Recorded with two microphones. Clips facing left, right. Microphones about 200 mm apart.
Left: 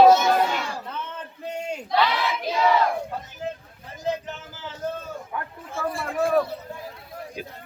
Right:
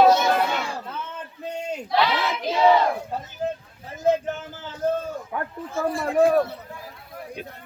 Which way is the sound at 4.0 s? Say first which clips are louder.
Right 7 dB; 50° right (ahead or behind).